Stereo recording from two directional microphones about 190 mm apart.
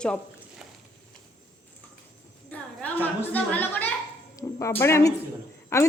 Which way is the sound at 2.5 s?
5° left (ahead or behind).